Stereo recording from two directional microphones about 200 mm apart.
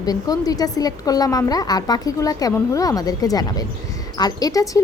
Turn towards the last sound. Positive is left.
turn(degrees=15)  # may be behind; listen again after turning